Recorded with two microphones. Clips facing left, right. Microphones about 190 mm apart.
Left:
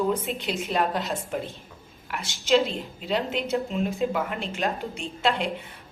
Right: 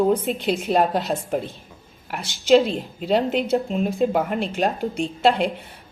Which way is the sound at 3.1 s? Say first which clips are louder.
Right 7 dB; 40° right (ahead or behind).